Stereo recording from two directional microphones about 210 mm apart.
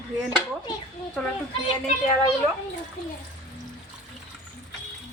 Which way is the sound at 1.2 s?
Centre (ahead or behind).